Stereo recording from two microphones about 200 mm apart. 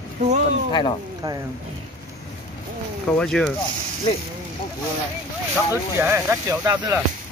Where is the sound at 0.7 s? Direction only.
20° left (ahead or behind).